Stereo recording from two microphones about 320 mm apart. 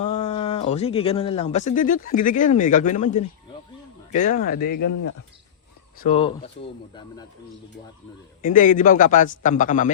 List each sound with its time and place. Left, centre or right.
0.0 s speech: left
4.7 s speech: left
6.0 s speech: centre
8.4 s speech: left